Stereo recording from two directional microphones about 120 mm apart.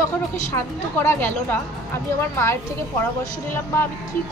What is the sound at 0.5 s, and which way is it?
A woman's voice, 20° left (ahead or behind).